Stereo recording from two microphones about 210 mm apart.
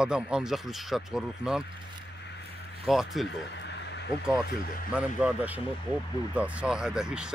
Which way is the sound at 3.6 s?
55° left (ahead or behind).